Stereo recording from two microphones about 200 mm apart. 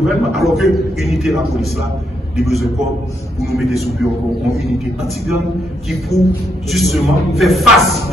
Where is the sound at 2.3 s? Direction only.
Centre (ahead or behind).